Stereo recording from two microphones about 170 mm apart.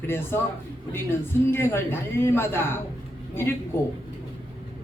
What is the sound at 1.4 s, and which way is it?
Speech, 15° left (ahead or behind).